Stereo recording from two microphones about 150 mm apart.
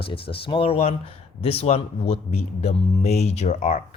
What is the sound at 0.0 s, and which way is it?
A man's voice, 35° left (ahead or behind).